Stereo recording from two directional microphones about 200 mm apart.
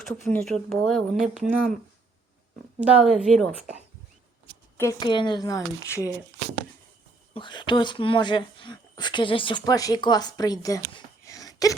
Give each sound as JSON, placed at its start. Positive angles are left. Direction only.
{"t": 0.3, "sound": "speech", "side_deg": 0}
{"t": 2.9, "sound": "speech", "side_deg": -5}
{"t": 4.8, "sound": "speech", "side_deg": 15}
{"t": 7.3, "sound": "speech", "side_deg": 25}